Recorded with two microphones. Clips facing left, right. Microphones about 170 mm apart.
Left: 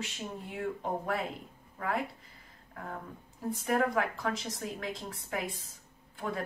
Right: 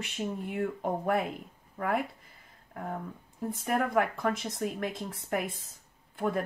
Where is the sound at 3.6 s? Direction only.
55° right (ahead or behind).